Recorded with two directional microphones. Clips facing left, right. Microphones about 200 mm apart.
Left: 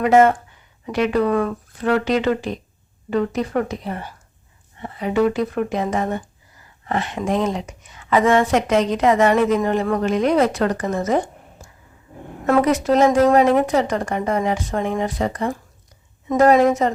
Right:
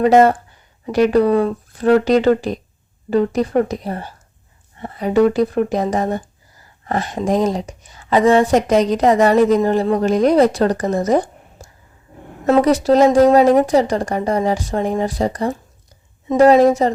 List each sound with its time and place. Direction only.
0.0 s speech: 35° right (ahead or behind)